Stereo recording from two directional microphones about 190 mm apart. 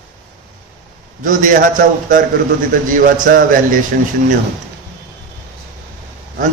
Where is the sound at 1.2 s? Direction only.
45° right (ahead or behind).